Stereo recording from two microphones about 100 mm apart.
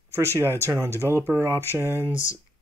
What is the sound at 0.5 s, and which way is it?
Speech, 30° right (ahead or behind).